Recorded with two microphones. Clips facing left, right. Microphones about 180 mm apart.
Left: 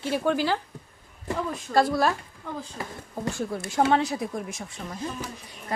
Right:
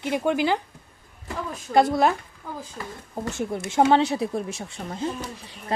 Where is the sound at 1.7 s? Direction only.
20° right (ahead or behind).